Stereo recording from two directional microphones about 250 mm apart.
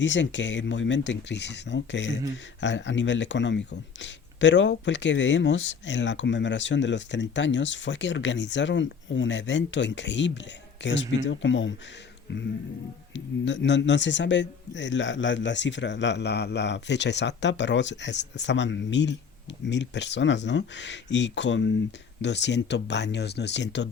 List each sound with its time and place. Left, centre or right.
0.0 s speech: left
13.1 s speech: left